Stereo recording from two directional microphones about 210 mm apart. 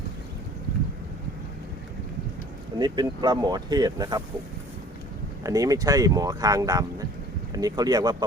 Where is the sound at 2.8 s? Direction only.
20° right (ahead or behind).